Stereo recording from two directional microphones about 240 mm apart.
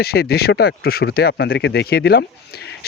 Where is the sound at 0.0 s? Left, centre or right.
Left.